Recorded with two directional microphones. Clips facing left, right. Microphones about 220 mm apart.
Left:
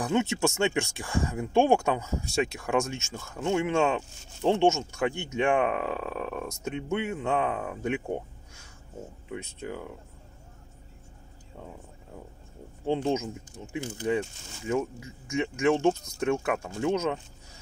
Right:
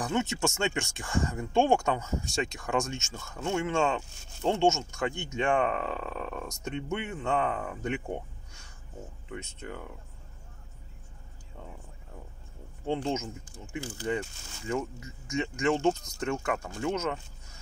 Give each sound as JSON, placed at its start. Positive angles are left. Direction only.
{"t": 0.0, "sound": "speech", "side_deg": 10}
{"t": 9.3, "sound": "speech", "side_deg": 10}
{"t": 12.8, "sound": "speech", "side_deg": 15}